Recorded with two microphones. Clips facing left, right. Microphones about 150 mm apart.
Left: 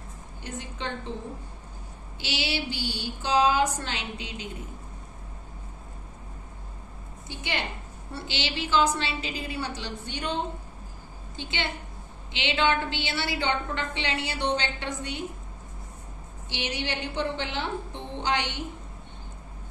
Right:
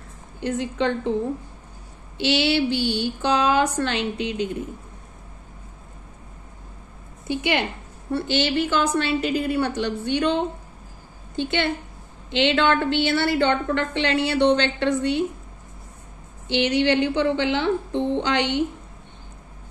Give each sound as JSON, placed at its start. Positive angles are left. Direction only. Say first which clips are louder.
{"t": 0.4, "sound": "a woman's voice", "louder": "right 13 dB", "side_deg": -70}
{"t": 2.1, "sound": "a woman's voice", "louder": "right 11 dB", "side_deg": -65}
{"t": 7.2, "sound": "a woman's voice", "louder": "right 10 dB", "side_deg": -65}
{"t": 8.1, "sound": "a woman's voice", "louder": "right 11 dB", "side_deg": -50}
{"t": 11.3, "sound": "a woman's voice", "louder": "right 10 dB", "side_deg": -55}
{"t": 16.4, "sound": "a woman's voice", "louder": "right 13 dB", "side_deg": -70}
{"t": 18.2, "sound": "a woman's voice", "louder": "right 6 dB", "side_deg": -65}